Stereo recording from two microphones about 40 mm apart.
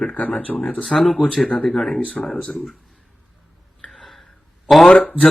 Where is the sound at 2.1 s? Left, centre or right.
Left.